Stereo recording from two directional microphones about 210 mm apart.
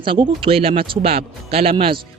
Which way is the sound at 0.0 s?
25° right (ahead or behind).